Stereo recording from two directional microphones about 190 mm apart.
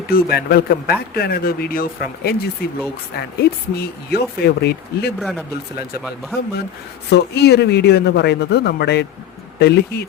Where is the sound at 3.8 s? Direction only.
55° left (ahead or behind).